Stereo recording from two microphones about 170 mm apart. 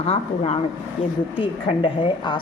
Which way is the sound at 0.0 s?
35° left (ahead or behind).